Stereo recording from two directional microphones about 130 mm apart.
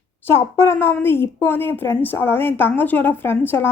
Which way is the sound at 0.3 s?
20° left (ahead or behind).